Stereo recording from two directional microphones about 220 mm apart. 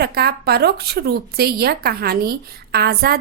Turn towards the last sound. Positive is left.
turn(degrees=-45)  # may be behind; listen again after turning